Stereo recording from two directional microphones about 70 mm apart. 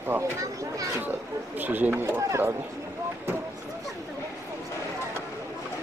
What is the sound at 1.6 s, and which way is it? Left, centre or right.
Speech, right.